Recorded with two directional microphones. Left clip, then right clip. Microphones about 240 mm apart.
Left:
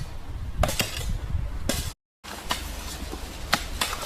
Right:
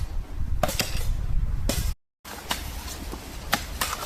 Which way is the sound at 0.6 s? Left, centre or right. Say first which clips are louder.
Even; centre.